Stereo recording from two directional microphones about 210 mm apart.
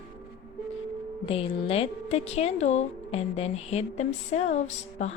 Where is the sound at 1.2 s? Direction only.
25° left (ahead or behind).